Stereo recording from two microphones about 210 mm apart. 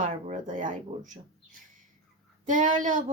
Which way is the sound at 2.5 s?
35° right (ahead or behind).